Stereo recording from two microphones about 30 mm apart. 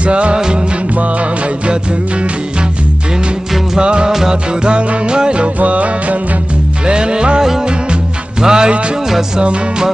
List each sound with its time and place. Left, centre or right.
0.0 s music: right
3.8 s music: right
5.6 s music: right
6.9 s music: right